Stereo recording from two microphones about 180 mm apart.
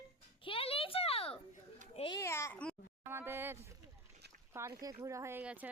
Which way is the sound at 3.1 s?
10° right (ahead or behind).